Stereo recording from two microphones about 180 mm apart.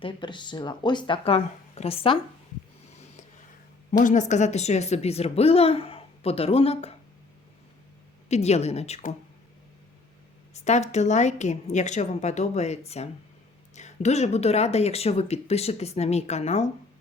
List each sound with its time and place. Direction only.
0.0 s speech: 25° left (ahead or behind)
3.9 s a woman's voice: 45° left (ahead or behind)
8.3 s a woman's voice: 35° left (ahead or behind)
10.5 s a woman's voice: 40° left (ahead or behind)